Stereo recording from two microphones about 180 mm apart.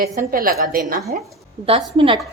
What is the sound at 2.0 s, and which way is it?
Speech, 30° right (ahead or behind).